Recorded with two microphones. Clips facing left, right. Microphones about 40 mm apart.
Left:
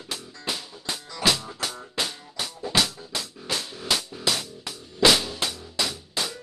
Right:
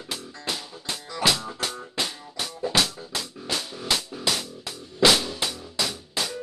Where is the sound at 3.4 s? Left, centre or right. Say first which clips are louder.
Right 1 dB; centre.